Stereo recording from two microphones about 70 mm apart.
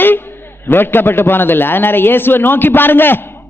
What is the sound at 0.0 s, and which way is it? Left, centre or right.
A man's voice, left.